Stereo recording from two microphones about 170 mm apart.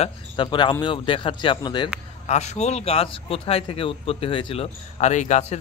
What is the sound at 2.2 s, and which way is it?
A man's voice, 40° left (ahead or behind).